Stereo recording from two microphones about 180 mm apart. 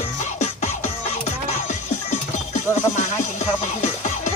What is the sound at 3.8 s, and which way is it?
Music, 40° left (ahead or behind).